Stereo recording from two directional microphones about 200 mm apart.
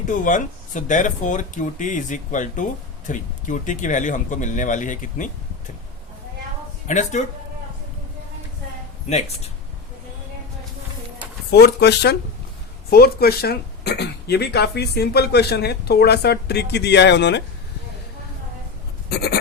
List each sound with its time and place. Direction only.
0.1 s speech: 40° left (ahead or behind)
6.8 s speech: 35° left (ahead or behind)
9.0 s speech: 35° left (ahead or behind)
11.5 s speech: 55° left (ahead or behind)
19.1 s goat: 50° left (ahead or behind)